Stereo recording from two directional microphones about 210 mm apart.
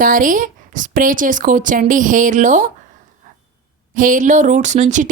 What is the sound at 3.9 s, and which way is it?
A woman's voice, 40° right (ahead or behind).